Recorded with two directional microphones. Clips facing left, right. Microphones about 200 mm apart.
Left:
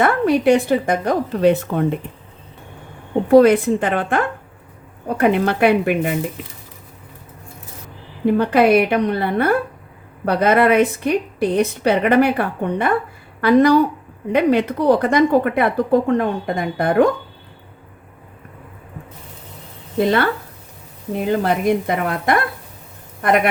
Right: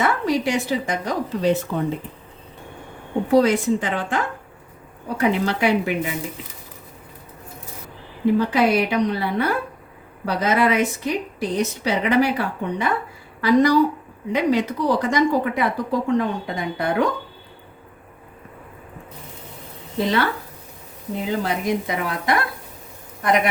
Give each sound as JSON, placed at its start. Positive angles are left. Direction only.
{"t": 0.0, "sound": "speech", "side_deg": 55}
{"t": 3.2, "sound": "speech", "side_deg": 55}
{"t": 8.4, "sound": "speech", "side_deg": 55}
{"t": 21.2, "sound": "speech", "side_deg": 55}